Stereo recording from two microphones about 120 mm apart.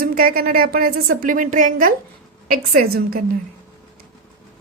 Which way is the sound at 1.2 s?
90° right.